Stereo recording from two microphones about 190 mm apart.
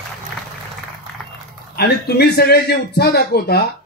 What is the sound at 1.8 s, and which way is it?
Speech, 60° left (ahead or behind).